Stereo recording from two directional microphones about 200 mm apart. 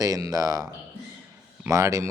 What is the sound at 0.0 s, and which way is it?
A man's voice, 15° right (ahead or behind).